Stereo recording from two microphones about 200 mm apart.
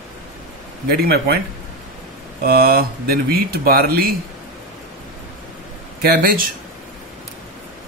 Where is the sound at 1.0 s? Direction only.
50° right (ahead or behind).